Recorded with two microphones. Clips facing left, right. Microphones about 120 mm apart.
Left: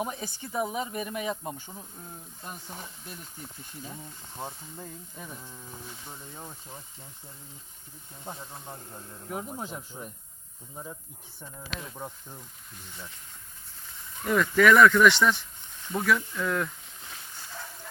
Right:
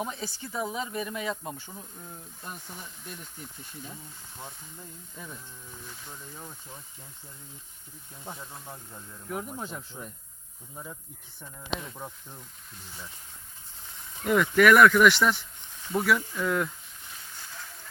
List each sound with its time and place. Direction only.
0.0 s speech: 15° left (ahead or behind)
0.9 s speech: 50° left (ahead or behind)
1.2 s speech: 15° left (ahead or behind)
6.1 s speech: 25° left (ahead or behind)
9.3 s speech: 10° left (ahead or behind)
11.9 s speech: 5° left (ahead or behind)
14.3 s speech: 15° right (ahead or behind)